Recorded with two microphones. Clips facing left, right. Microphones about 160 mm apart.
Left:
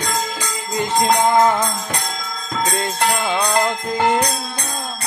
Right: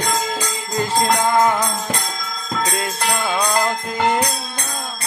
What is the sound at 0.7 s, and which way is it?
Music, 20° left (ahead or behind).